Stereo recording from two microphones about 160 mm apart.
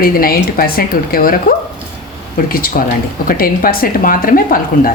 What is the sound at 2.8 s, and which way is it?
A woman's voice, 60° left (ahead or behind).